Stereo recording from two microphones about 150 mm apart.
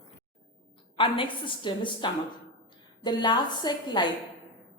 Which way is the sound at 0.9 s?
35° left (ahead or behind).